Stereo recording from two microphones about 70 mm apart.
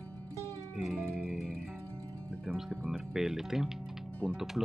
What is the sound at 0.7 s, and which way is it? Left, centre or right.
Speech, centre.